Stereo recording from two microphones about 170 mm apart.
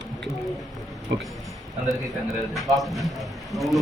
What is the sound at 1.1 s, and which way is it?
Speech, 90° right.